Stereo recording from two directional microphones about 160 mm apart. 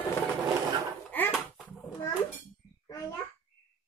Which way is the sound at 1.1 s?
10° left (ahead or behind).